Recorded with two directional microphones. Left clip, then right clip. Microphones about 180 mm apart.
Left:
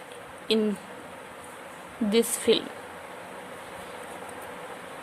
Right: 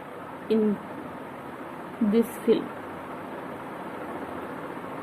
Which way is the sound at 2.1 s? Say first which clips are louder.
Left 1 dB; 40° left (ahead or behind).